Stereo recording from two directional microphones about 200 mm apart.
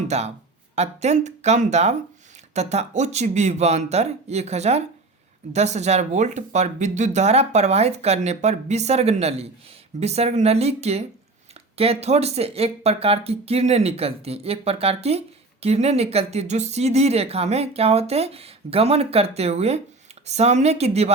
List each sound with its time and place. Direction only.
0.1 s speech: 35° right (ahead or behind)